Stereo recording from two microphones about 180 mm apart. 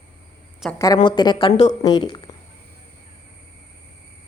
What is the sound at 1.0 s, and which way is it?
Speech, 25° left (ahead or behind).